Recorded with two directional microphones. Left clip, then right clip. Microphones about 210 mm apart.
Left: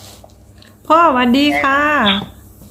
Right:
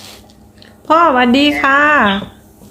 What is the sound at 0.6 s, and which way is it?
Speech, centre (ahead or behind).